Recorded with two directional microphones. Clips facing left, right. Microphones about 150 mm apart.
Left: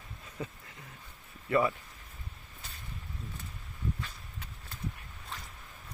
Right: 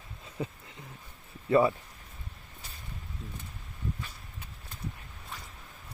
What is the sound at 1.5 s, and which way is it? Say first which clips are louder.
Speech: right 4 dB; 25° right (ahead or behind).